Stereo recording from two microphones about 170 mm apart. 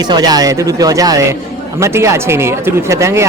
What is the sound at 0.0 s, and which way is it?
Speech, 25° right (ahead or behind).